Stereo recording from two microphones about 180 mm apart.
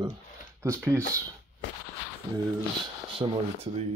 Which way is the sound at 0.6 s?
15° right (ahead or behind).